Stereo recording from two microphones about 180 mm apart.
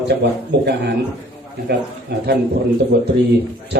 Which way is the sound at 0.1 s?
65° right (ahead or behind).